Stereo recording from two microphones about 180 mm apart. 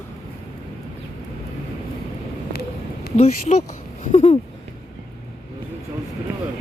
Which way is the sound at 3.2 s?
40° left (ahead or behind).